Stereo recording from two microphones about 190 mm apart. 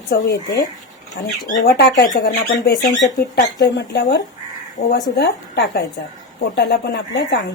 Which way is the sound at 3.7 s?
60° left (ahead or behind).